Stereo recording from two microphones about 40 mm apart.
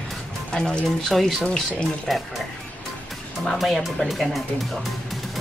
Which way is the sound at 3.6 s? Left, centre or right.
Centre.